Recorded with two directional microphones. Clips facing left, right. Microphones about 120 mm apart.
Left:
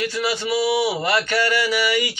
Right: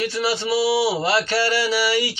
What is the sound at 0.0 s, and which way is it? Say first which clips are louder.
Mantra: right 1 dB; 30° right (ahead or behind).